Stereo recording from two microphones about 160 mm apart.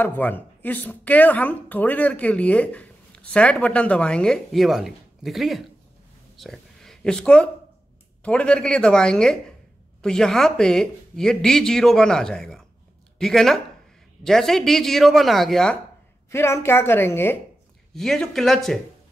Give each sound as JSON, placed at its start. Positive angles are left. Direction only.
{"t": 0.0, "sound": "speech", "side_deg": 10}
{"t": 6.3, "sound": "a sound", "side_deg": 0}
{"t": 8.2, "sound": "speech", "side_deg": 5}
{"t": 16.3, "sound": "speech", "side_deg": 15}
{"t": 17.9, "sound": "speech", "side_deg": 0}